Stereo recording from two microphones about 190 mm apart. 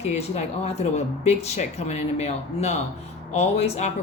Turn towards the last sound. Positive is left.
turn(degrees=35)  # may be behind; listen again after turning